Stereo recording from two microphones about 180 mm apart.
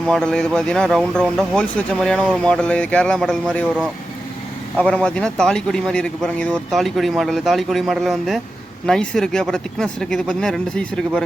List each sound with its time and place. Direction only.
0.1 s speech: 5° left (ahead or behind)
4.8 s speech: 5° left (ahead or behind)